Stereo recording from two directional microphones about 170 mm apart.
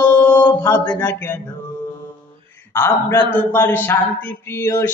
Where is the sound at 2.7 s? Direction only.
15° left (ahead or behind).